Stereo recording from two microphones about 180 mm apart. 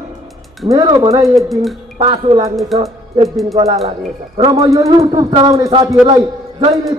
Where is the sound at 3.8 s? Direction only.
30° right (ahead or behind).